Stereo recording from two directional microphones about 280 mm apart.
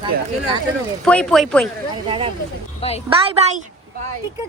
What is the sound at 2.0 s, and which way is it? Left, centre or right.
Speech, centre.